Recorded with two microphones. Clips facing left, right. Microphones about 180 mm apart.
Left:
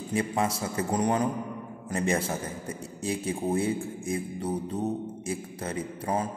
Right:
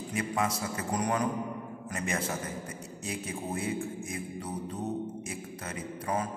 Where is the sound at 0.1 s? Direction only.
30° left (ahead or behind).